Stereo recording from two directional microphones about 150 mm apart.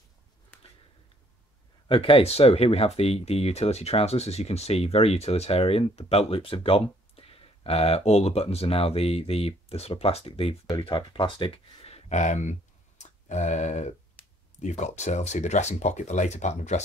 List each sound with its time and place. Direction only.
1.9 s speech: 35° left (ahead or behind)